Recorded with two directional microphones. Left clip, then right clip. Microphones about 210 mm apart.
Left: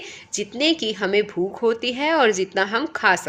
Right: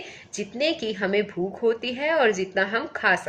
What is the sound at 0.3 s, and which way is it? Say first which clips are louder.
A woman's voice: left 4 dB; 45° left (ahead or behind).